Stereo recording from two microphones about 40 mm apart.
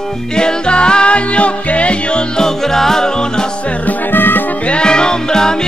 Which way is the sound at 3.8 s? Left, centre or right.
Left.